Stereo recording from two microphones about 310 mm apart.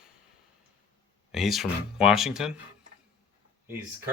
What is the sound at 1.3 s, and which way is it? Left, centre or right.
Speech, centre.